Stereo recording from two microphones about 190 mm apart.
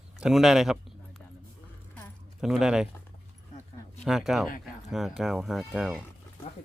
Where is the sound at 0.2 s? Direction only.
Centre (ahead or behind).